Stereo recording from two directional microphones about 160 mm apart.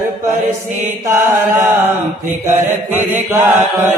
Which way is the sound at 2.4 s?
10° right (ahead or behind).